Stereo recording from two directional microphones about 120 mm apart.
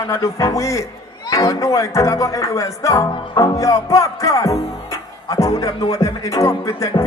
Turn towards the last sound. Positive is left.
turn(degrees=25)  # may be behind; listen again after turning